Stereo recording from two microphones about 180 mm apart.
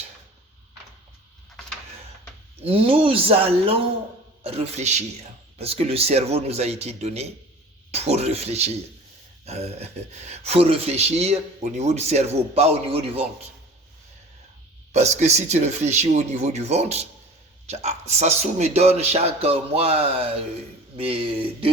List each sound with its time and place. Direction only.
2.6 s speech: 30° right (ahead or behind)
14.9 s speech: 40° right (ahead or behind)
18.1 s speech: 40° right (ahead or behind)